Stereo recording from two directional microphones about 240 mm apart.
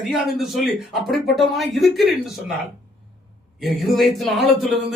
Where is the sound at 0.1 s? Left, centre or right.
Centre.